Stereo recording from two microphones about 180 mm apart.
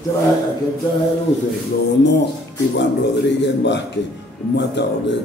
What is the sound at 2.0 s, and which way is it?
A man's voice, 75° left (ahead or behind).